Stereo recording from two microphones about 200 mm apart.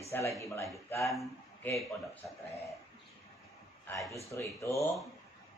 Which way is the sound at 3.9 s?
10° left (ahead or behind).